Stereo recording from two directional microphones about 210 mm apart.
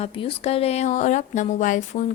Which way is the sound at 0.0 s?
25° left (ahead or behind).